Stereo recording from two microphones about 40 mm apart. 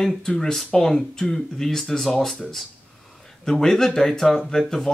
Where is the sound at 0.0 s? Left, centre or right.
Centre.